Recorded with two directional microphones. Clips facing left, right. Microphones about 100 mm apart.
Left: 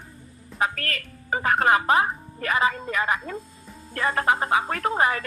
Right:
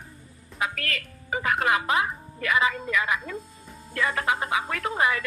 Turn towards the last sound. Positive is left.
turn(degrees=40)  # may be behind; listen again after turning